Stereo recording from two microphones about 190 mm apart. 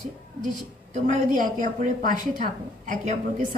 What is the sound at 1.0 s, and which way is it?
A woman's voice, 45° right (ahead or behind).